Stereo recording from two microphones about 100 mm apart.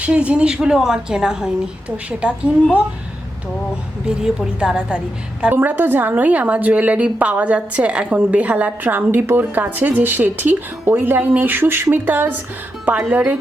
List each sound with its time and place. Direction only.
0.0 s a woman's voice: 15° right (ahead or behind)
4.0 s a woman's voice: 10° right (ahead or behind)